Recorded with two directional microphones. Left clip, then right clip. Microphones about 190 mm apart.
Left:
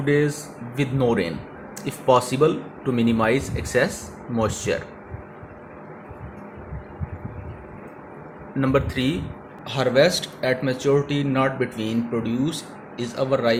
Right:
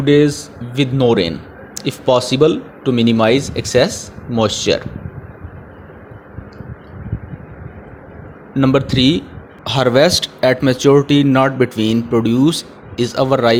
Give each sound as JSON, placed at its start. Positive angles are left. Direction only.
{"t": 0.0, "sound": "speech", "side_deg": -35}
{"t": 8.5, "sound": "speech", "side_deg": -45}
{"t": 9.6, "sound": "speech", "side_deg": -50}